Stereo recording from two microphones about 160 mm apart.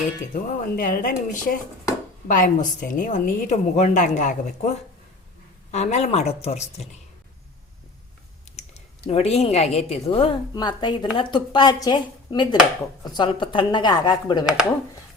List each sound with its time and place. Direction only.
0.3 s a woman's voice: 55° left (ahead or behind)
5.7 s a woman's voice: 45° left (ahead or behind)
9.0 s a woman's voice: 40° left (ahead or behind)